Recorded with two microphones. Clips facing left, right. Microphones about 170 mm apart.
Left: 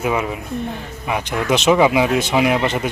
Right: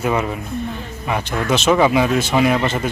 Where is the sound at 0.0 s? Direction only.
10° left (ahead or behind).